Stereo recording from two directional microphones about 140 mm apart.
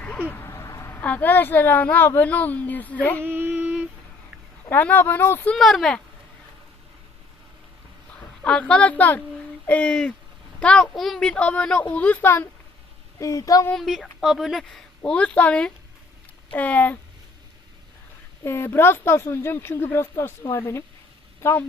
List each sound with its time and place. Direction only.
0.3 s a sound: 15° left (ahead or behind)
1.0 s speech: 10° left (ahead or behind)
3.2 s female singing: 15° right (ahead or behind)
4.7 s speech: 15° left (ahead or behind)
5.5 s speech: centre (ahead or behind)
8.4 s speech: 5° left (ahead or behind); by 13.7 s 25° left (ahead or behind)
13.7 s speech: centre (ahead or behind)
18.4 s speech: 15° left (ahead or behind)